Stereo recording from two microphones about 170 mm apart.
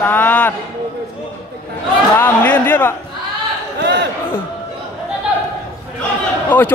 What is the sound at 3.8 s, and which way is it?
Speech, 90° right.